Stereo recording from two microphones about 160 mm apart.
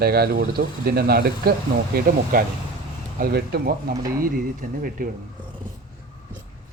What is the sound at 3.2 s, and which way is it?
Speech, 80° right.